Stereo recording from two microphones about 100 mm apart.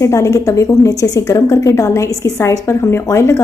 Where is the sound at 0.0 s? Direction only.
30° left (ahead or behind).